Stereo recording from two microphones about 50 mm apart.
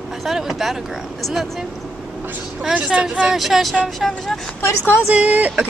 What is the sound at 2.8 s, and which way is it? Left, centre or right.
Speech, right.